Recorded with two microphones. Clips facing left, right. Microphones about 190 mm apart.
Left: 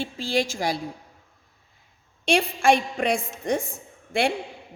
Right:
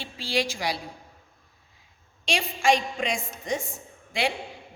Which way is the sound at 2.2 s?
55° left (ahead or behind).